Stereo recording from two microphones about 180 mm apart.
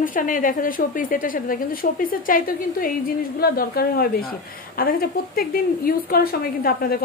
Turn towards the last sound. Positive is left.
turn(degrees=55)  # may be behind; listen again after turning